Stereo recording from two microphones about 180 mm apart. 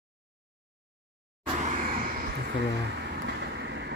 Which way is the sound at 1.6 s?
45° right (ahead or behind).